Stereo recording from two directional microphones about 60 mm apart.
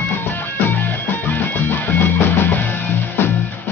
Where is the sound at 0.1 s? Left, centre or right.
Left.